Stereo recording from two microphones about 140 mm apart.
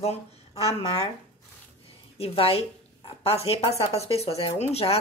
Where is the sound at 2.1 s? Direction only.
45° left (ahead or behind).